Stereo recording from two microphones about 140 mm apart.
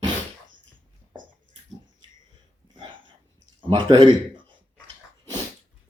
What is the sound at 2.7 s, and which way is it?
Hiccup, 35° right (ahead or behind).